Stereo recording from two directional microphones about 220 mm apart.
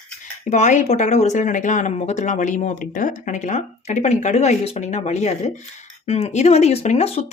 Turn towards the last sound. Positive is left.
turn(degrees=30)  # may be behind; listen again after turning